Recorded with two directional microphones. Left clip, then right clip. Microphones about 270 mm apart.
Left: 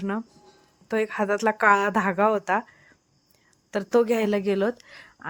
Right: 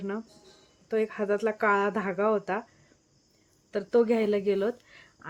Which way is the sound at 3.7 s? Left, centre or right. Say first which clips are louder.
Left 3 dB; left.